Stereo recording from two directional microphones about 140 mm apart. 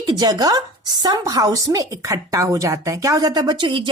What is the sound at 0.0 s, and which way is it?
A woman's voice, 30° right (ahead or behind).